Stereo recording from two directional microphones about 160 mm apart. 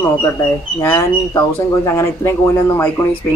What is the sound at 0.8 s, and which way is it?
Speech, 15° left (ahead or behind).